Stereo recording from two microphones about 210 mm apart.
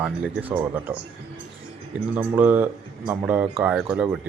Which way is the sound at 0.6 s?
5° right (ahead or behind).